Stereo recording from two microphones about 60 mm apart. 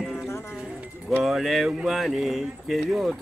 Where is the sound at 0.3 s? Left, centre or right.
Left.